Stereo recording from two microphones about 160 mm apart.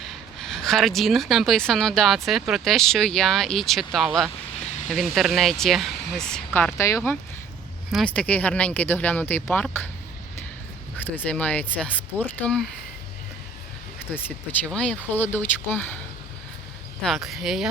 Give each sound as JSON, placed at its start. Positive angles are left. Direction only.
{"t": 0.0, "sound": "speech", "side_deg": 0}
{"t": 7.9, "sound": "speech", "side_deg": 0}
{"t": 11.0, "sound": "speech", "side_deg": 10}
{"t": 14.1, "sound": "speech", "side_deg": 10}
{"t": 17.0, "sound": "speech", "side_deg": 0}